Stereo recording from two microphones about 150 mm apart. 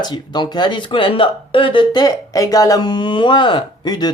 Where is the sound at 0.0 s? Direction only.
30° left (ahead or behind).